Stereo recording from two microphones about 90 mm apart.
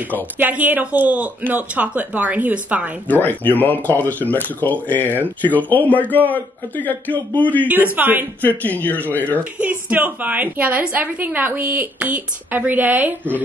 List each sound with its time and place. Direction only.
0.4 s speech: 20° right (ahead or behind)
3.1 s a man's voice: 20° left (ahead or behind)
7.6 s a woman's voice: 20° right (ahead or behind)
8.4 s a man's voice: 20° left (ahead or behind)
9.4 s a woman's voice: 15° right (ahead or behind)